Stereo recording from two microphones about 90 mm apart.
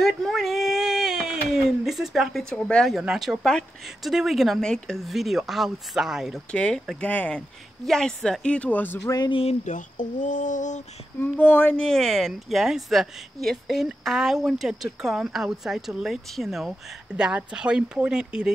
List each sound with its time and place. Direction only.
0.0 s a sound: centre (ahead or behind)
2.5 s speech: 10° left (ahead or behind)
2.9 s speech: 5° right (ahead or behind)
6.5 s speech: 10° left (ahead or behind)
7.8 s speech: 5° left (ahead or behind); by 9.0 s 20° left (ahead or behind)
9.0 s speech: 45° left (ahead or behind)
11.1 s speech: 15° left (ahead or behind); by 18.5 s 10° right (ahead or behind)